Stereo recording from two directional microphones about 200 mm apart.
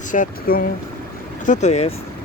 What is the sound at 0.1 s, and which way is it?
Speech, 45° left (ahead or behind).